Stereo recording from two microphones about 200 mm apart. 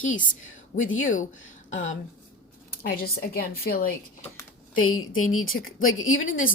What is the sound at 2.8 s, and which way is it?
A woman's voice, 50° left (ahead or behind).